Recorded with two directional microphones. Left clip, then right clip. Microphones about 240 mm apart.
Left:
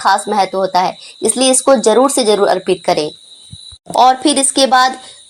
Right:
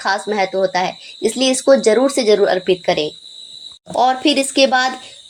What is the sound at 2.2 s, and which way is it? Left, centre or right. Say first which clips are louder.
A woman's voice: left 2 dB; centre.